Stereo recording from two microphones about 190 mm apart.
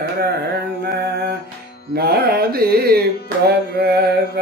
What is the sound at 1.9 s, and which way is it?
Carnatic music, 55° right (ahead or behind).